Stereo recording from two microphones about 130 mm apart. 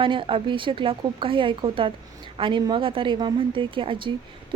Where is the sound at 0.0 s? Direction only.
40° right (ahead or behind).